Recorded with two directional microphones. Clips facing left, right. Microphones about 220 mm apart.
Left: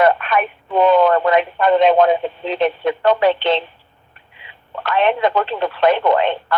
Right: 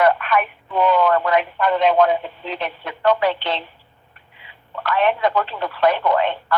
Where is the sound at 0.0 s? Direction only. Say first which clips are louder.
Left 2 dB; 25° left (ahead or behind).